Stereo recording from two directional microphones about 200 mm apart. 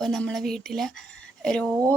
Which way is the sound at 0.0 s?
5° left (ahead or behind).